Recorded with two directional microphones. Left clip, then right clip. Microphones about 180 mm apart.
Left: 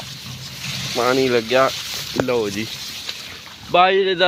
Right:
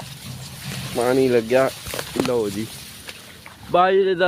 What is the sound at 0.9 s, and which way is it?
Speech, 15° right (ahead or behind).